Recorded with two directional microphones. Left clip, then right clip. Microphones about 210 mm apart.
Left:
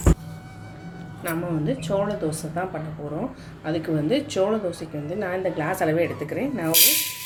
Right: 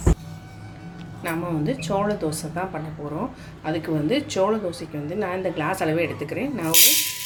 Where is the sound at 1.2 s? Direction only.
25° right (ahead or behind).